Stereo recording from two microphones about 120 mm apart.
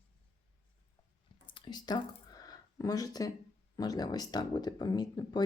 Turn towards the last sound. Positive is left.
turn(degrees=35)  # may be behind; listen again after turning